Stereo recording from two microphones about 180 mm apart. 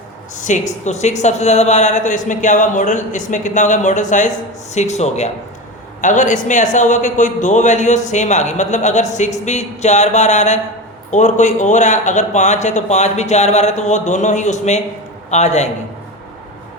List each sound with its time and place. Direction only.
0.3 s a woman's voice: 45° left (ahead or behind)